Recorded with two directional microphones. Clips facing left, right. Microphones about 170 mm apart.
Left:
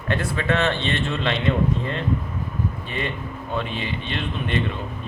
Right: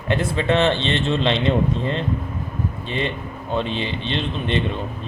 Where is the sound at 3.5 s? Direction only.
25° right (ahead or behind).